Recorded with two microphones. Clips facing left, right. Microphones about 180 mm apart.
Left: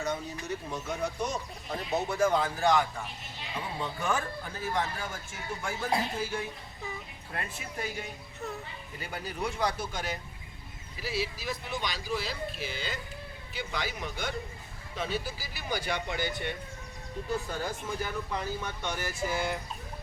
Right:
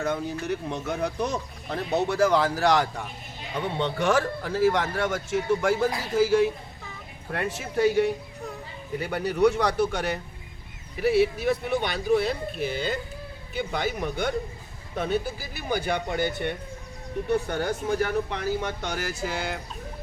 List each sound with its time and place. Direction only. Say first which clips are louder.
0.0 s speech: right 6 dB; 60° right (ahead or behind)
0.4 s speech: right 6 dB; 70° right (ahead or behind)
2.0 s a man's voice: right 5 dB; 80° right
7.3 s speech: right 10 dB; 75° right (ahead or behind); by 16.6 s 55° right (ahead or behind)
17.2 s speech: right 8 dB; 70° right (ahead or behind); by 19.5 s 90° right